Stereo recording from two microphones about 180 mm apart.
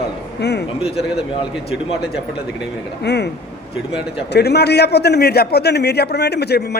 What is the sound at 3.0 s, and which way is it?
A man's voice, 70° left (ahead or behind).